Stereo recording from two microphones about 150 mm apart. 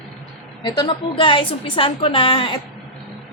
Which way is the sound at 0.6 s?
30° left (ahead or behind).